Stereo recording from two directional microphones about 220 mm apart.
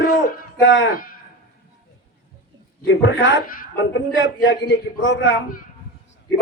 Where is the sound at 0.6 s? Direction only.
60° left (ahead or behind).